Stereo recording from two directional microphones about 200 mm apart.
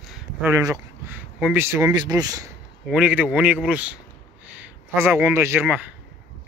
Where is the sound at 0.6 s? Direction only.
15° right (ahead or behind).